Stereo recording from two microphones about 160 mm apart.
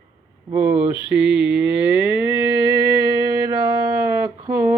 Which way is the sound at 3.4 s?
25° right (ahead or behind).